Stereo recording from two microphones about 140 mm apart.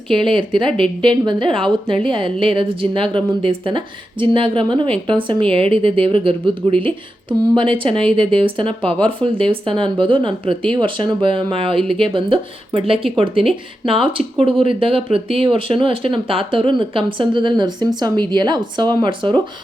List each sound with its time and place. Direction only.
0.1 s speech: 35° right (ahead or behind)